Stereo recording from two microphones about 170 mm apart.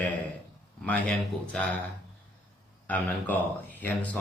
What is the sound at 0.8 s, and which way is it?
Speech, 5° left (ahead or behind).